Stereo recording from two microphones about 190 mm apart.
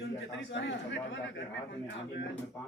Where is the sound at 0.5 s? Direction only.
75° left (ahead or behind).